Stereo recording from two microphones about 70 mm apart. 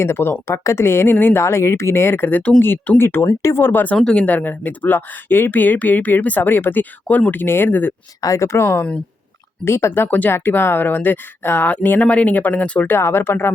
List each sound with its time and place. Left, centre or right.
0.0 s speech: left
3.9 s speech: centre
4.4 s speech: left
8.2 s speech: left; by 12.9 s centre
12.9 s speech: left